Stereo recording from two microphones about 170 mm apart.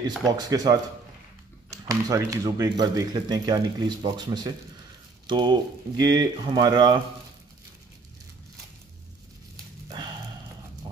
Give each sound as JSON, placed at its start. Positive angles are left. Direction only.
{"t": 0.4, "sound": "speech", "side_deg": -20}